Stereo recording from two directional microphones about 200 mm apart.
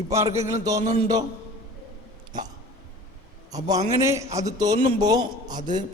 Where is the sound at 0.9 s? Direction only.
20° right (ahead or behind).